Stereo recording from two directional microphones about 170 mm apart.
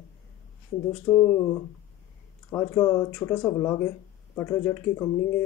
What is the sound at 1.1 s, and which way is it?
Speech, 10° left (ahead or behind).